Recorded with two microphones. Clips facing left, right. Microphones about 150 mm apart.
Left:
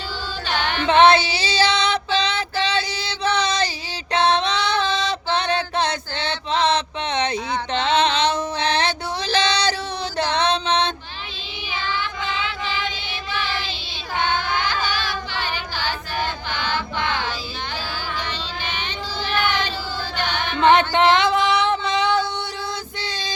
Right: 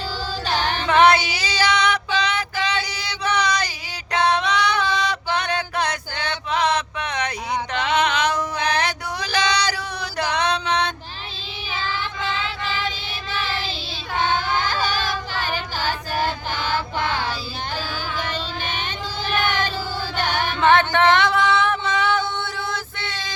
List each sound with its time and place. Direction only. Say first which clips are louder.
0.4 s music: even; 40° right (ahead or behind)
0.9 s female singing: left 2 dB; 25° left (ahead or behind)
4.1 s music: left 1 dB; 25° left (ahead or behind)
8.0 s a sound: left 1 dB; 25° left (ahead or behind)
9.5 s female singing: left 1 dB; 25° left (ahead or behind)
10.3 s mantra: left 1 dB; 25° left (ahead or behind)
14.5 s choir: right 1 dB; 40° right (ahead or behind)
16.5 s chant: right 1 dB; 45° right (ahead or behind)
18.3 s child singing: right 2 dB; 50° right (ahead or behind)
20.2 s music: right 2 dB; 45° right (ahead or behind)
20.6 s music: left 2 dB; 20° left (ahead or behind)
22.7 s female singing: even; 20° left (ahead or behind)